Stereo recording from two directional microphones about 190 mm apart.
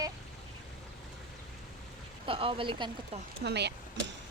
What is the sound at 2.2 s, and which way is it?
Speech, 30° right (ahead or behind).